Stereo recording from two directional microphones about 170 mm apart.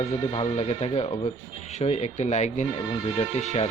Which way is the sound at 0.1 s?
30° left (ahead or behind).